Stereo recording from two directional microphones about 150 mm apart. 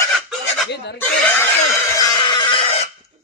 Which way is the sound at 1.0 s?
15° left (ahead or behind).